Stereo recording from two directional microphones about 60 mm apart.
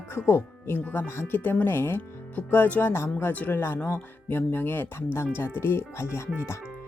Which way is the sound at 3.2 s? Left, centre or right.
Left.